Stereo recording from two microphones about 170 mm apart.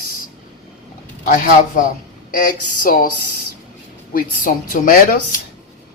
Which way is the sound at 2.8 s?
55° left (ahead or behind).